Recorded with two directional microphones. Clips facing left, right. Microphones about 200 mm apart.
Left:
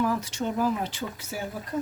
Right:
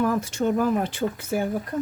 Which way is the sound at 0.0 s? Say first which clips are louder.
Right 4 dB; 50° right (ahead or behind).